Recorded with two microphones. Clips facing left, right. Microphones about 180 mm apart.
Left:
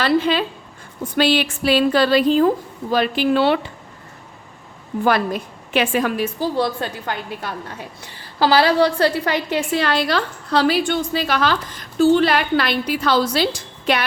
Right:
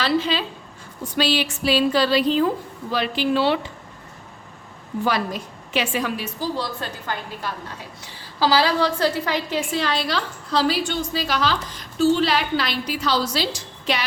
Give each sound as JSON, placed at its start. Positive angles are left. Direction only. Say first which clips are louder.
{"t": 0.0, "sound": "a woman's voice", "louder": "left 4 dB", "side_deg": 55}
{"t": 5.0, "sound": "a woman's voice", "louder": "left 5 dB", "side_deg": 55}